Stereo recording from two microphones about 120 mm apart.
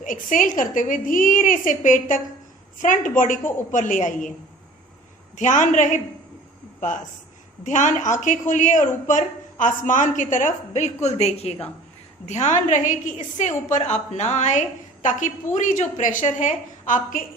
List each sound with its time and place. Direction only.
0.0 s a woman's voice: 90° left
5.4 s a woman's voice: 90° left; by 11.5 s 60° left (ahead or behind)
12.3 s a woman's voice: 70° left (ahead or behind)
15.5 s a woman's voice: 90° left